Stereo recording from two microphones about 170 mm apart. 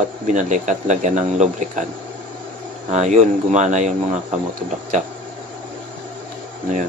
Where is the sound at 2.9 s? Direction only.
45° right (ahead or behind).